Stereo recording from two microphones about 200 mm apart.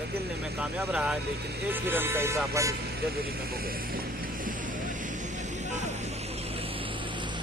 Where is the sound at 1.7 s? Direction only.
10° right (ahead or behind).